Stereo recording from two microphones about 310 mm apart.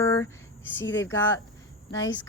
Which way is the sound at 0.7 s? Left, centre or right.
Left.